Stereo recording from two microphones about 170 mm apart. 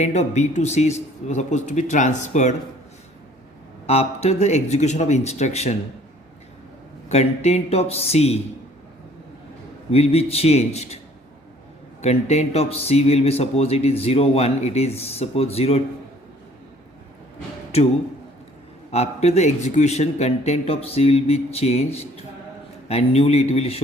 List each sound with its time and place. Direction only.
0.0 s a man's voice: 40° left (ahead or behind)
3.8 s speech: 35° left (ahead or behind)
7.1 s speech: 40° left (ahead or behind)
9.9 s speech: 35° left (ahead or behind)
12.0 s speech: 40° left (ahead or behind)
18.9 s speech: 40° left (ahead or behind)
22.9 s speech: 35° left (ahead or behind)